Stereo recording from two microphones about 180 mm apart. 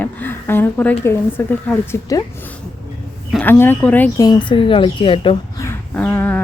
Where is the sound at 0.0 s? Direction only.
10° left (ahead or behind).